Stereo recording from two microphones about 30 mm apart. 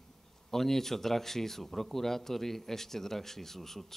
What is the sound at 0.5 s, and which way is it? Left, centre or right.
Speech, centre.